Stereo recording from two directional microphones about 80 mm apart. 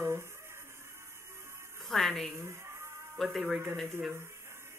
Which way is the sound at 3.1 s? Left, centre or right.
Centre.